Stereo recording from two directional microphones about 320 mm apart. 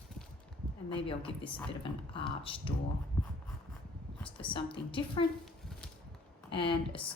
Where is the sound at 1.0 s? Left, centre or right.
Centre.